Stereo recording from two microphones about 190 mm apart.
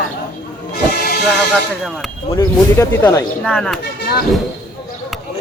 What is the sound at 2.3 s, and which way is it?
Speech, 15° left (ahead or behind).